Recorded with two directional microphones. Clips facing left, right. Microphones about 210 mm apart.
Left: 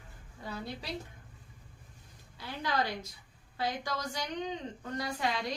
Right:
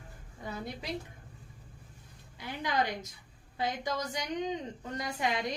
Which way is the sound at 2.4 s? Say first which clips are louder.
Right 1 dB; 20° right (ahead or behind).